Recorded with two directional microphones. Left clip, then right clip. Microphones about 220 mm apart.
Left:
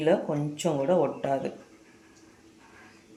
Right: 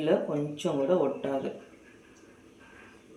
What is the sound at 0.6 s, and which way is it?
Speech, 50° left (ahead or behind).